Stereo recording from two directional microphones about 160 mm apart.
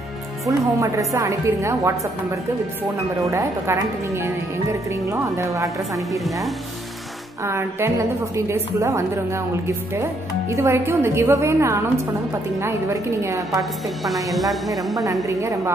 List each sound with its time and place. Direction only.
0.5 s a woman's voice: 20° right (ahead or behind)
3.3 s a woman's voice: 20° right (ahead or behind)
5.9 s a woman's voice: centre (ahead or behind)
7.4 s a woman's voice: 15° right (ahead or behind)
10.5 s a woman's voice: 15° right (ahead or behind)
13.6 s a woman's voice: centre (ahead or behind)
15.2 s speech: 20° right (ahead or behind)